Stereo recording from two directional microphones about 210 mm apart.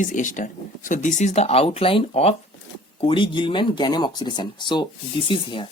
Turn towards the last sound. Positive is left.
turn(degrees=25)  # may be behind; listen again after turning